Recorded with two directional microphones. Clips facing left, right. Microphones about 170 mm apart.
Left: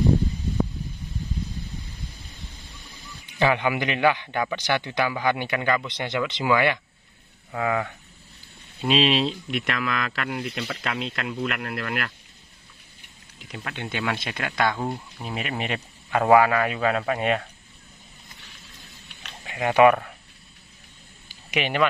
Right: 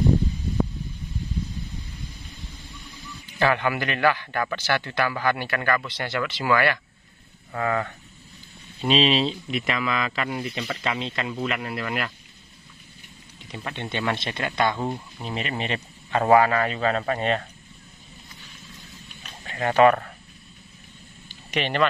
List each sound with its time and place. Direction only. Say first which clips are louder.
3.3 s a man's voice: left 1 dB; 15° left (ahead or behind); by 12.1 s centre (ahead or behind)
13.5 s a man's voice: right 1 dB; 5° left (ahead or behind)
19.4 s speech: left 1 dB; 15° left (ahead or behind)
21.3 s a sound: even; 10° left (ahead or behind)